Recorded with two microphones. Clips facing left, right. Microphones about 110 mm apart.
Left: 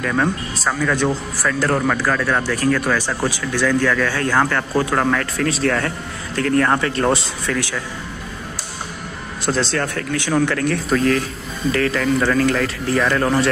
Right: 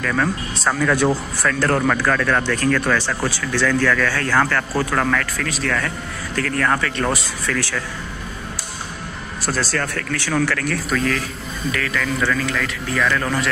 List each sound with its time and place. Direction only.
0.0 s speech: 20° left (ahead or behind)
0.6 s speech: centre (ahead or behind)
1.4 s speech: 10° left (ahead or behind)
9.5 s speech: 20° left (ahead or behind)